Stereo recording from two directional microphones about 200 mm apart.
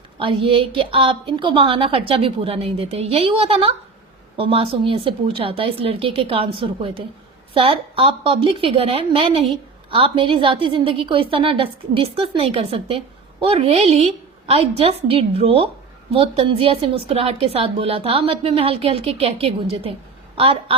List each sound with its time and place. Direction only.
0.2 s a woman's voice: 25° right (ahead or behind)